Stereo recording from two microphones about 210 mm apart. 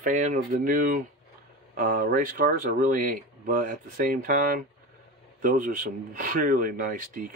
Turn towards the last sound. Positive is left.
turn(degrees=-40)  # may be behind; listen again after turning